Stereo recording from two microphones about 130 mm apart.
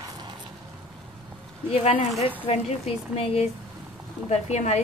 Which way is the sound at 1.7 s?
50° left (ahead or behind).